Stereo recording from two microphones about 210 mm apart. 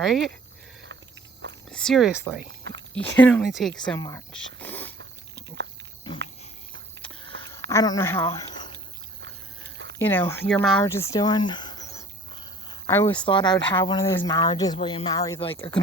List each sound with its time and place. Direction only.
0.0 s speech: centre (ahead or behind)
1.7 s speech: centre (ahead or behind)
3.9 s speech: 15° left (ahead or behind)
4.3 s a sound: 5° left (ahead or behind)
7.7 s speech: 15° left (ahead or behind)
8.4 s a sound: 20° left (ahead or behind)
10.0 s speech: 10° left (ahead or behind)
13.2 s speech: 20° left (ahead or behind)